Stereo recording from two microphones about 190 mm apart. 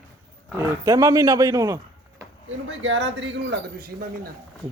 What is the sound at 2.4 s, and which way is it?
A man's voice, 85° right.